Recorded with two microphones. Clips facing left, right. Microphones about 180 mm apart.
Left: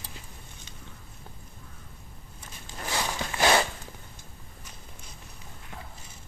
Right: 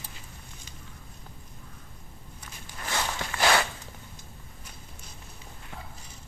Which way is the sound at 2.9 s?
20° left (ahead or behind).